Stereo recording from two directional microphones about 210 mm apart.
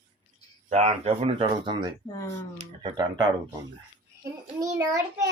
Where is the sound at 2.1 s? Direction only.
15° left (ahead or behind).